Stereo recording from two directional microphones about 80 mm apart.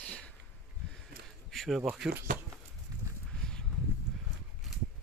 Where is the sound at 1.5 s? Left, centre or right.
Centre.